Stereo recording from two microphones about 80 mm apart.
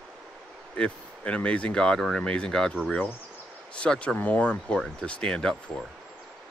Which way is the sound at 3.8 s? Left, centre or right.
Centre.